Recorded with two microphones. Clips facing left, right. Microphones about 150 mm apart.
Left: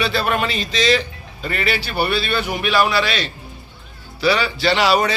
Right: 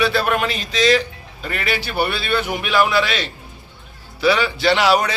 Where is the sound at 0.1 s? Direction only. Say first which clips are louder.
Right 1 dB; 10° right (ahead or behind).